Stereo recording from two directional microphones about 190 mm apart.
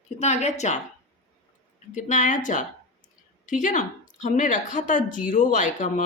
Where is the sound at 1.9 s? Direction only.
40° left (ahead or behind).